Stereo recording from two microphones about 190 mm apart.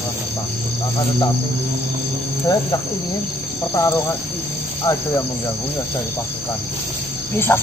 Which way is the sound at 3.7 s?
15° left (ahead or behind).